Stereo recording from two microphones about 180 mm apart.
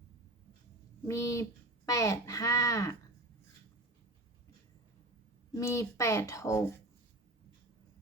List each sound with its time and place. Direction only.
1.0 s speech: 15° left (ahead or behind)
5.5 s speech: 15° left (ahead or behind)